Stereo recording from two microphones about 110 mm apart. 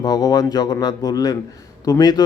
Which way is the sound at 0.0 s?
35° left (ahead or behind).